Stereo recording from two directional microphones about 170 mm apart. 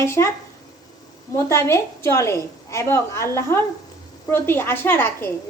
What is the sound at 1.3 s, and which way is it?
A woman's voice, 15° left (ahead or behind).